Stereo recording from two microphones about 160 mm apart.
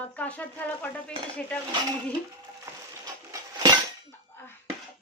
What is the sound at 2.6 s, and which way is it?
Coin, 20° right (ahead or behind).